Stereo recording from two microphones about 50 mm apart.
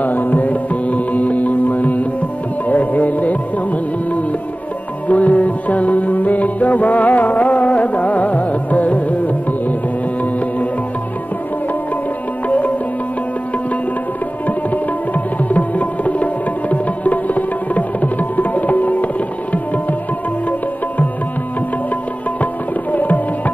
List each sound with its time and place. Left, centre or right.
0.0 s music: left
12.4 s music: left
14.7 s tabla: left
22.4 s tabla: left